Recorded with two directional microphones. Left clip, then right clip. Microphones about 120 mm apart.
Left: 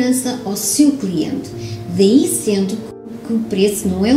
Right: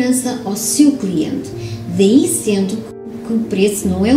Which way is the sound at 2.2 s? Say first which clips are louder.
Right 1 dB; 35° left (ahead or behind).